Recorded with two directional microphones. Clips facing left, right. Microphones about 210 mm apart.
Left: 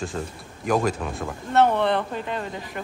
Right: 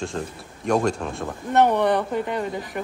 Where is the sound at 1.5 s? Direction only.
15° right (ahead or behind).